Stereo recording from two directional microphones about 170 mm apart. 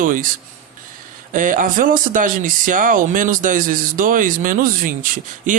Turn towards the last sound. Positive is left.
turn(degrees=-50)  # may be behind; listen again after turning